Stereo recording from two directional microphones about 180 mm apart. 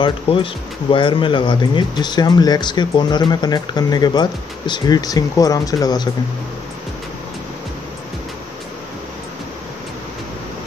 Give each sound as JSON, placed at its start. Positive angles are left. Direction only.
{"t": 0.0, "sound": "speech", "side_deg": 30}